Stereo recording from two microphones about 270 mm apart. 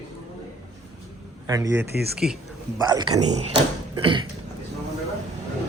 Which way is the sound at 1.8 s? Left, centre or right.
Right.